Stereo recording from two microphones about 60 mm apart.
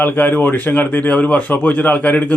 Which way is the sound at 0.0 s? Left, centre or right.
Left.